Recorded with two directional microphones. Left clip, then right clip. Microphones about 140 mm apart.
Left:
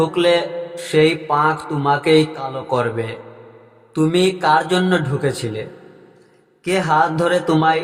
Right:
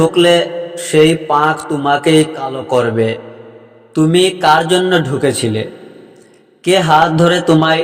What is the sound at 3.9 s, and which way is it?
Speech, 25° right (ahead or behind).